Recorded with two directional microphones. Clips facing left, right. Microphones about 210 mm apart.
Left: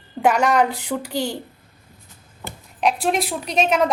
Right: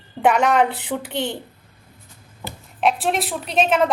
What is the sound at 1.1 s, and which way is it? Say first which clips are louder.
Speech: left 1 dB; 40° left (ahead or behind).